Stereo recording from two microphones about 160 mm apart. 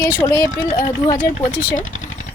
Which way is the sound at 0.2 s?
20° left (ahead or behind).